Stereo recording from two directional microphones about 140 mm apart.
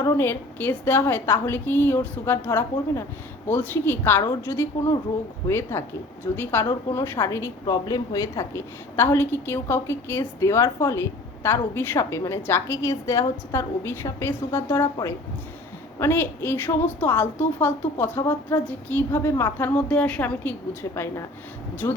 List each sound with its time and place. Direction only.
0.2 s a woman's voice: 15° left (ahead or behind)
16.0 s a woman's voice: 15° left (ahead or behind)